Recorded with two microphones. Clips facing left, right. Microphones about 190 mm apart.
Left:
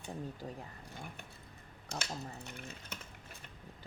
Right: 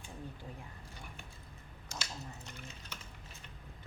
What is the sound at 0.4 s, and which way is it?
Speech, 40° left (ahead or behind).